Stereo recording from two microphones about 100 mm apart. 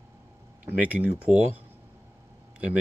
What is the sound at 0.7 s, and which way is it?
Speech, 15° right (ahead or behind).